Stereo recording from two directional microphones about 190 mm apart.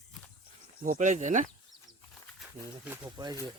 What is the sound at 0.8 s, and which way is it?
Speech, 40° right (ahead or behind).